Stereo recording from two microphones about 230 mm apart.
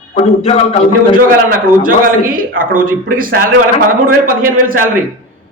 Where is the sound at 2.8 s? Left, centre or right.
Right.